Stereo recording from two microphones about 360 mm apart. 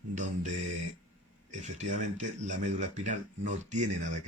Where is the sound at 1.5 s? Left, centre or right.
Centre.